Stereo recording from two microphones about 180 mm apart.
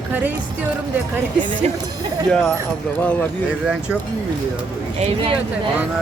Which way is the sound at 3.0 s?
10° left (ahead or behind).